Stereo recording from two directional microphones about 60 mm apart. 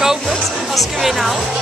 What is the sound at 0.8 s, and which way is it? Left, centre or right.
Speech, centre.